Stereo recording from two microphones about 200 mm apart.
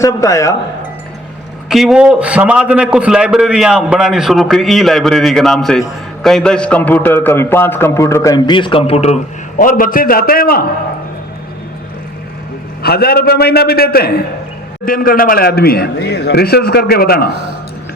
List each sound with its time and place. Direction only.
0.0 s a man's voice: 15° left (ahead or behind)
1.7 s a man's voice: centre (ahead or behind); by 10.7 s 50° left (ahead or behind)
12.8 s a man's voice: 50° left (ahead or behind)